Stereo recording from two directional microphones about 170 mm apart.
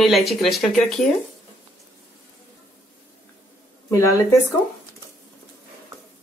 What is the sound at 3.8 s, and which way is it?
Speech, 15° left (ahead or behind).